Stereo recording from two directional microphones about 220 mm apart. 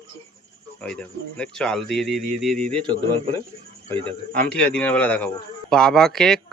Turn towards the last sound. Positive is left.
turn(degrees=0)  # may be behind; listen again after turning